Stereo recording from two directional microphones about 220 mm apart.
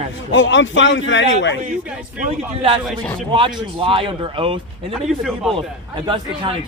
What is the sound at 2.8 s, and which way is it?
Speech, centre (ahead or behind).